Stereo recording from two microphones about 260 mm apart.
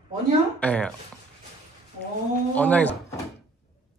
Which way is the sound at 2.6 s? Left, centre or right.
Centre.